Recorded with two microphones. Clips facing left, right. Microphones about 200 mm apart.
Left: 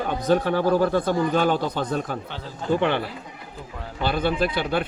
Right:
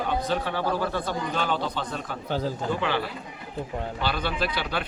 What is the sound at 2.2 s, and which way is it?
Speech, 40° right (ahead or behind).